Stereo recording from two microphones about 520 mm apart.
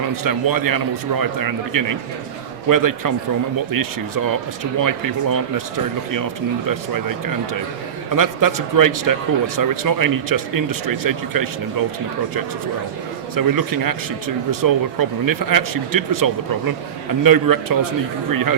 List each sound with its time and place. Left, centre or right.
0.3 s speech: right
6.7 s speech: right
13.3 s speech: right